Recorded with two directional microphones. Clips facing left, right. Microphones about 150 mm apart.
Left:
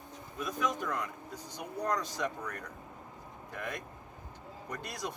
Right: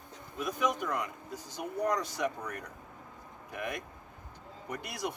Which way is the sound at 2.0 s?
70° right (ahead or behind).